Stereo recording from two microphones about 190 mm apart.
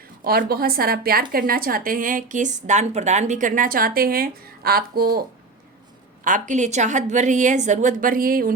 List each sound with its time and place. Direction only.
0.3 s a woman's voice: 55° right (ahead or behind)
6.2 s a woman's voice: 40° right (ahead or behind)